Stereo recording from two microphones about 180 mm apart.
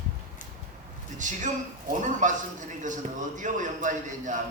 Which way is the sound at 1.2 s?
45° right (ahead or behind).